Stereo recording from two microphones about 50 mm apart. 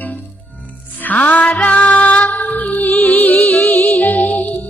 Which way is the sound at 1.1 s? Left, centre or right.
Left.